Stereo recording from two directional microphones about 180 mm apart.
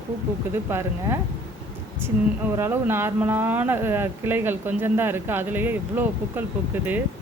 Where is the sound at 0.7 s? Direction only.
15° right (ahead or behind).